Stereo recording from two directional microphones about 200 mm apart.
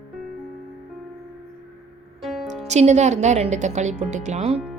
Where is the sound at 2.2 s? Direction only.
Centre (ahead or behind).